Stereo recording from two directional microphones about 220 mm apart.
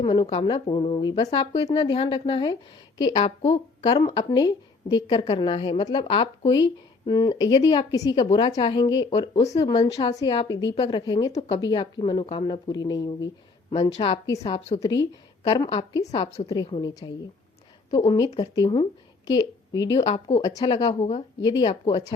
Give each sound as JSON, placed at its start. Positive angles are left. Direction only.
{"t": 0.0, "sound": "a woman's voice", "side_deg": 20}
{"t": 14.3, "sound": "a woman's voice", "side_deg": 15}
{"t": 16.5, "sound": "a woman's voice", "side_deg": 15}
{"t": 17.9, "sound": "a woman's voice", "side_deg": 20}